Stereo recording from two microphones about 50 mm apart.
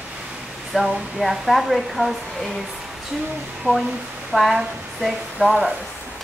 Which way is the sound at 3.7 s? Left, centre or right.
Right.